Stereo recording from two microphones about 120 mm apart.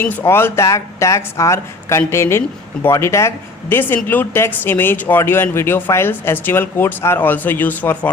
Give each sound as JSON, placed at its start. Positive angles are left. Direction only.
{"t": 0.0, "sound": "speech", "side_deg": 15}